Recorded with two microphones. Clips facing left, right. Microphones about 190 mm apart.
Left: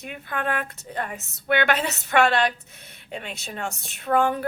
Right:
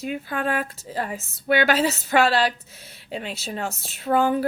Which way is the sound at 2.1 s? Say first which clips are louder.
Even; 35° right (ahead or behind).